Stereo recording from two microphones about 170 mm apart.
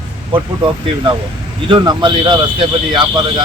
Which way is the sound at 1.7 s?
25° right (ahead or behind).